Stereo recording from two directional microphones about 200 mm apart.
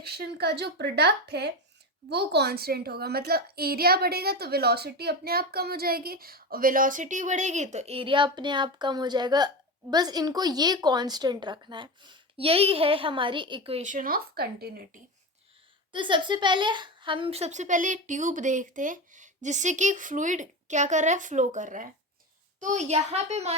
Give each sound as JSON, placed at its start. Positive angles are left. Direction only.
{"t": 0.0, "sound": "a child's voice", "side_deg": -50}
{"t": 15.9, "sound": "a woman's voice", "side_deg": -25}